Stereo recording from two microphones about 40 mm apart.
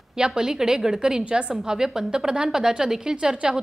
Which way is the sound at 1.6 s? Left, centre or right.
Centre.